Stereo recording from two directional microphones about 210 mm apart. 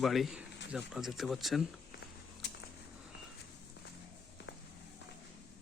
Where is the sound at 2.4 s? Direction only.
55° left (ahead or behind).